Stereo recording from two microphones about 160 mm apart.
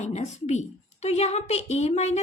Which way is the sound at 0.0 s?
45° left (ahead or behind).